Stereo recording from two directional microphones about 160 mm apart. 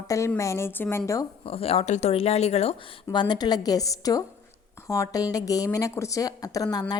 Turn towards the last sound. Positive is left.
turn(degrees=25)  # may be behind; listen again after turning